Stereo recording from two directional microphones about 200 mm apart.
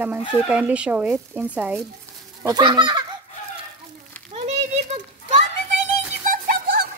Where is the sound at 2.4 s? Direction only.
20° right (ahead or behind).